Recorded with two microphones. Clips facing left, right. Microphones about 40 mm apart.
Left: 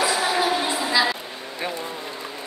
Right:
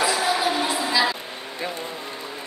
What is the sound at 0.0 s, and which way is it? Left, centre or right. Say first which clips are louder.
Music: even; centre.